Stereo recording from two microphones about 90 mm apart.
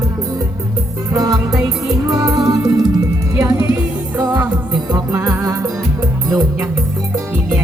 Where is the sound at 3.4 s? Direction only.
35° right (ahead or behind).